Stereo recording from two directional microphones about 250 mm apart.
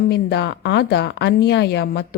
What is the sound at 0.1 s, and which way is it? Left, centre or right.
A woman's voice, left.